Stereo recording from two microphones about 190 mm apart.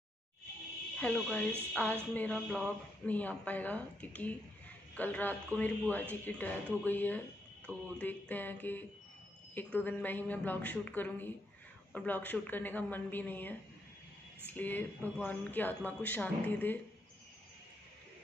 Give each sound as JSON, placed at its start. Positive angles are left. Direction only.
{"t": 0.9, "sound": "speech", "side_deg": 5}